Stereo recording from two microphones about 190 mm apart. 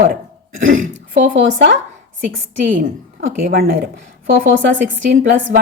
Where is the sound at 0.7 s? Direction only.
45° right (ahead or behind).